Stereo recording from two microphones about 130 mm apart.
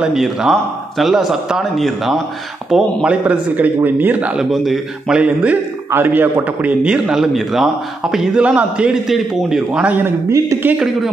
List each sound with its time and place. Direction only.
0.0 s a man's voice: 5° right (ahead or behind)
9.7 s a man's voice: 15° right (ahead or behind)